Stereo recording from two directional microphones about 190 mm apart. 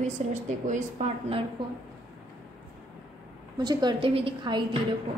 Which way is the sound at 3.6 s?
20° right (ahead or behind).